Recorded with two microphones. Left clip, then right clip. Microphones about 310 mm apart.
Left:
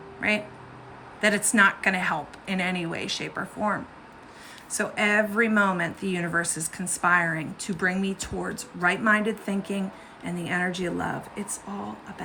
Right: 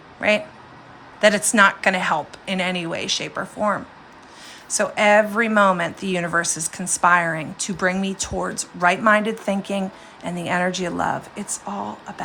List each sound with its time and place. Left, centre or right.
0.2 s speech: centre